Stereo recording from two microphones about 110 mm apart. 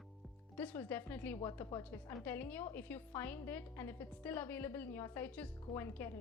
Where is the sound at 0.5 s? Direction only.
15° left (ahead or behind).